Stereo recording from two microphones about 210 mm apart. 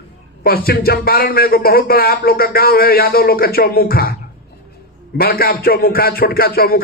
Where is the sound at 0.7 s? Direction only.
45° left (ahead or behind).